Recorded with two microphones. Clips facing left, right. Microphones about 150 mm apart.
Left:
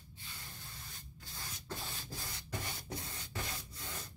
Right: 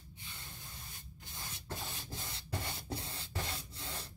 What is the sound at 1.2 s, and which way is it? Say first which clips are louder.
Rub: right 1 dB; 20° right (ahead or behind).